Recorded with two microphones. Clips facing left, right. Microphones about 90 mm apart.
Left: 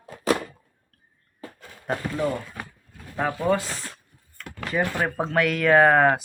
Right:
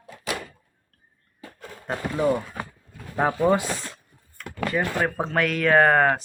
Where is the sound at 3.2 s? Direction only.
20° right (ahead or behind).